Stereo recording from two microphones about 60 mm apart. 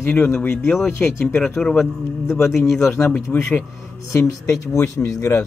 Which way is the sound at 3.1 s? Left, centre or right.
Left.